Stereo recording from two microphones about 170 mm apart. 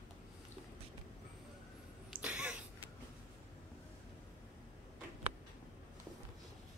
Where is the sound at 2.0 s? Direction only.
5° right (ahead or behind).